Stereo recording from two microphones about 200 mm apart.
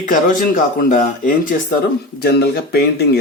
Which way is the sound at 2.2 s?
50° left (ahead or behind).